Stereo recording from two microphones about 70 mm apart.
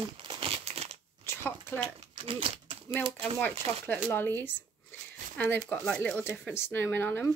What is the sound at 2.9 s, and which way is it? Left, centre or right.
Speech, left.